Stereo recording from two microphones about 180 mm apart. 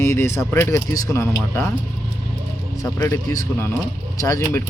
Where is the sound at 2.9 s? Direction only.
15° left (ahead or behind).